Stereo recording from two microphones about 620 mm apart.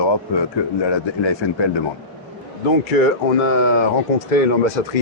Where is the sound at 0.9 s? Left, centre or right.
Left.